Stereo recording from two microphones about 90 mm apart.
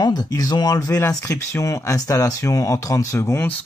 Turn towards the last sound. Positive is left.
turn(degrees=35)  # may be behind; listen again after turning